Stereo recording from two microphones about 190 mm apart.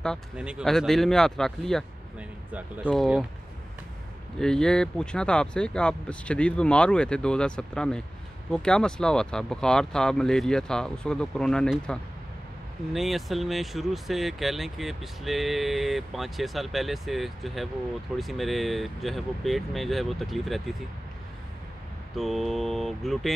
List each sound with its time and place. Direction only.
0.0 s speech: centre (ahead or behind)
4.4 s speech: 5° left (ahead or behind)
22.1 s speech: centre (ahead or behind)